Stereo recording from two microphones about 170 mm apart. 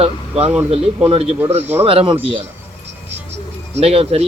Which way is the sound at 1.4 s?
10° right (ahead or behind).